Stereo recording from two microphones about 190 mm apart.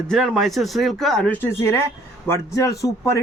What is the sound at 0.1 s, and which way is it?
Speech, centre (ahead or behind).